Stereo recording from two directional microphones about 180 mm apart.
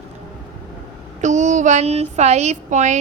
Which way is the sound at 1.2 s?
40° right (ahead or behind).